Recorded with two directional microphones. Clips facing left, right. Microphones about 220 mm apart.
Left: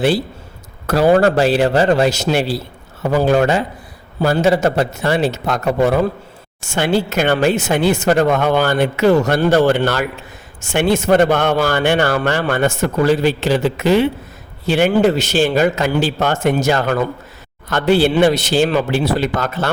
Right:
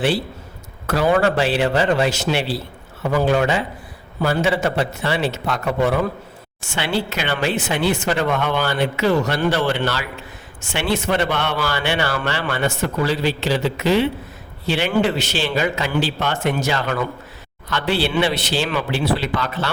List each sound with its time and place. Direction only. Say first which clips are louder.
0.9 s a man's voice: left 5 dB; 35° left (ahead or behind)